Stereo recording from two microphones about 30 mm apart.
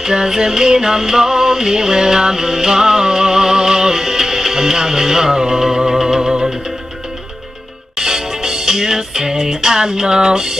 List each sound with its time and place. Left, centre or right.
0.0 s music: centre
7.9 s music: centre